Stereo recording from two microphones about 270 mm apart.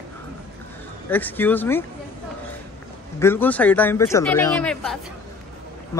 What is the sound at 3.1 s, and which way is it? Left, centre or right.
Speech, centre.